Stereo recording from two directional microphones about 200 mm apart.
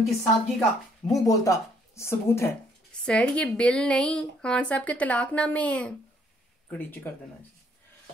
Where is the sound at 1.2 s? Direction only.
15° left (ahead or behind).